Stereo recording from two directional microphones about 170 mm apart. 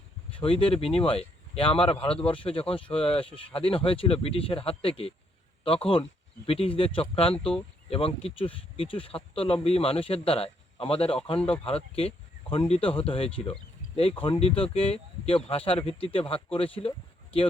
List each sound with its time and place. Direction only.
0.3 s speech: 30° left (ahead or behind)
11.3 s speech: 5° left (ahead or behind)
11.6 s speech: 35° left (ahead or behind)